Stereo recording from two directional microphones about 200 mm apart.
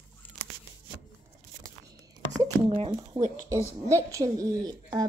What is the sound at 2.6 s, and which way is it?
A woman's voice, 25° right (ahead or behind).